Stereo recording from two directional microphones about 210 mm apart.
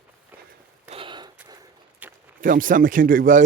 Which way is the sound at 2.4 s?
40° right (ahead or behind).